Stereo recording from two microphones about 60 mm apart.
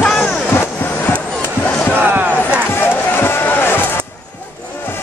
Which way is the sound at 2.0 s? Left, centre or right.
Right.